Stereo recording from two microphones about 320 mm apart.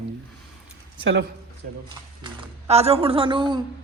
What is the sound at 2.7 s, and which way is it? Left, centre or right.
Speech, centre.